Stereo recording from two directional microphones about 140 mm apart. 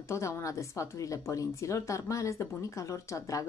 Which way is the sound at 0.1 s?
20° left (ahead or behind).